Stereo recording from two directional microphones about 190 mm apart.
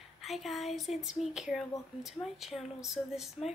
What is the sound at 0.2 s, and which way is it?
Speech, centre (ahead or behind).